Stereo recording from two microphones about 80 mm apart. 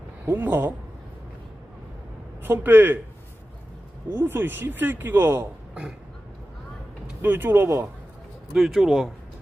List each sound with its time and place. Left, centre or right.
0.3 s speech: right
2.4 s a man's voice: right
4.1 s speech: right
7.2 s speech: right
8.5 s speech: centre